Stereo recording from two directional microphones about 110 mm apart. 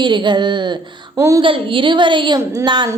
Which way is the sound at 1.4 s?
50° right (ahead or behind).